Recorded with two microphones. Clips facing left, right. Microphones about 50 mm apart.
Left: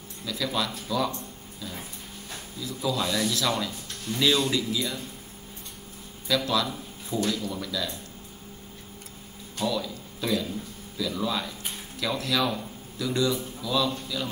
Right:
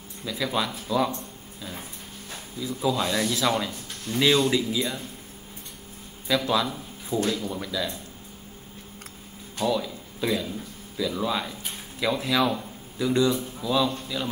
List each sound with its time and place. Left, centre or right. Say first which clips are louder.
0.2 s speech: right 2 dB; centre
1.6 s a sound: even; centre
2.6 s speech: right 3 dB; centre
6.2 s speech: right 2 dB; right
9.6 s speech: right 3 dB; right